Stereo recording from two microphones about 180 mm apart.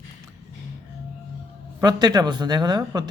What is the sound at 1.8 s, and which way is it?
A man's voice, 20° right (ahead or behind).